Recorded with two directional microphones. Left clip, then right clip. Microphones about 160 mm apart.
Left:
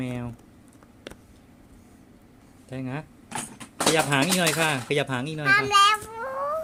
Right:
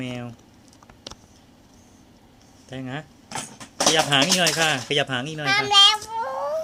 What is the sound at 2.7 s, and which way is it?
A child's voice, 15° left (ahead or behind).